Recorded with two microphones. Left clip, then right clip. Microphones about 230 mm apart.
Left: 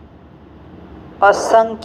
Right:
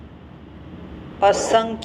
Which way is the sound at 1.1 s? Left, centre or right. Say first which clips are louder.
Left 5 dB; left.